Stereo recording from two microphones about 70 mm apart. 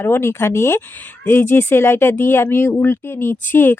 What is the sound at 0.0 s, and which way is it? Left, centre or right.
Speech, left.